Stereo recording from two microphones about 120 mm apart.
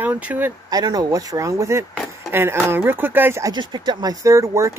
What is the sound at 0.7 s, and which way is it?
Speech, 30° right (ahead or behind).